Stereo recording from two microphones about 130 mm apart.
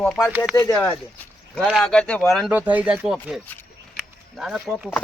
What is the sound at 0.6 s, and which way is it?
Speech, 25° left (ahead or behind).